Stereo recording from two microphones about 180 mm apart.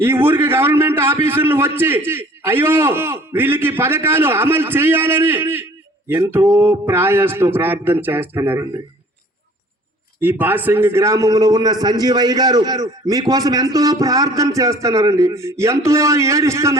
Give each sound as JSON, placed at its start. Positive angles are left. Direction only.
{"t": 0.0, "sound": "a man's voice", "side_deg": -15}
{"t": 10.2, "sound": "a man's voice", "side_deg": -10}